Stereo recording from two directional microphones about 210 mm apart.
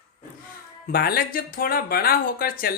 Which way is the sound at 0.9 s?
45° left (ahead or behind).